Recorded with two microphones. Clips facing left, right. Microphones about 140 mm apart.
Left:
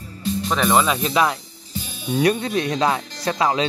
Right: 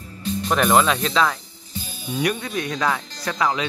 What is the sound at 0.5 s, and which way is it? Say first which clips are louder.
Speech: right 1 dB; centre (ahead or behind).